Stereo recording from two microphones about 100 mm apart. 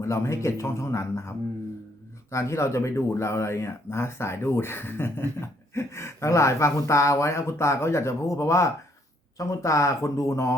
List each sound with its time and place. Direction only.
0.0 s speech: 30° left (ahead or behind)